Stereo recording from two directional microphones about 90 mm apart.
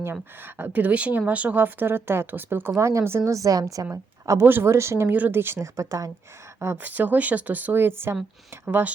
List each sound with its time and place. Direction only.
0.0 s a woman's voice: 25° right (ahead or behind); by 3.8 s 45° right (ahead or behind)
4.3 s a woman's voice: 25° right (ahead or behind)
6.8 s speech: 20° right (ahead or behind)